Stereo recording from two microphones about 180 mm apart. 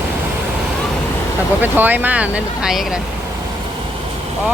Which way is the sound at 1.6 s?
10° right (ahead or behind).